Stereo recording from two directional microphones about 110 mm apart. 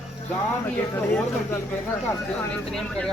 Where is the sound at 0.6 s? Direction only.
15° left (ahead or behind).